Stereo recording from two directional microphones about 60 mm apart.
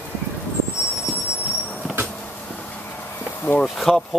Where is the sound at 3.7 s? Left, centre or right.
Centre.